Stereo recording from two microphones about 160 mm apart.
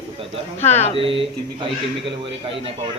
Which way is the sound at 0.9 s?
35° right (ahead or behind).